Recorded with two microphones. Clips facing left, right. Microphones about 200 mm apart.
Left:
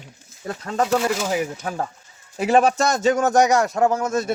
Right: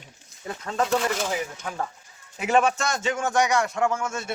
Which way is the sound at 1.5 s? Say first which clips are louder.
Left 4 dB; 35° left (ahead or behind).